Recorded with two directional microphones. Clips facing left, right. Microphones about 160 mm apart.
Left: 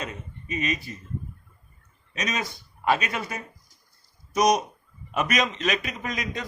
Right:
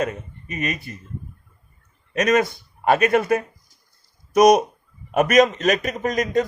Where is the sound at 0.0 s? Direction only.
50° right (ahead or behind).